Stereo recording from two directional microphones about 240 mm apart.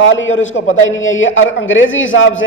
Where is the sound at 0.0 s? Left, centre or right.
Left.